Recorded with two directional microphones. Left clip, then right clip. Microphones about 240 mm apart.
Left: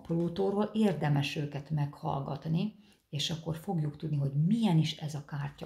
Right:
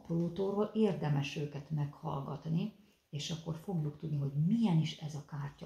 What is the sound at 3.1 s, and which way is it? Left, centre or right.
Speech, left.